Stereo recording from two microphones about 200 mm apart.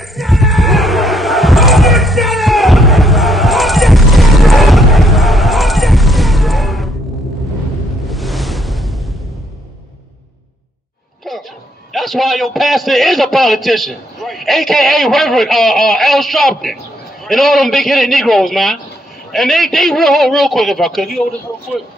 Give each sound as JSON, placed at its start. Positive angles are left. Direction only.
{"t": 0.1, "sound": "basketball bounce", "side_deg": 0}
{"t": 8.1, "sound": "ocean", "side_deg": 0}
{"t": 11.9, "sound": "a man's voice", "side_deg": 0}